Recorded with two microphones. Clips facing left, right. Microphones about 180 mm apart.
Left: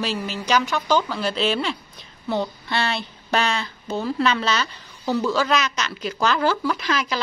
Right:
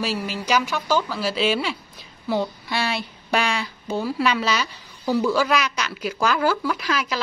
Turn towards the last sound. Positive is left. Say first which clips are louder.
# left 1 dB
turn(degrees=-5)  # may be behind; listen again after turning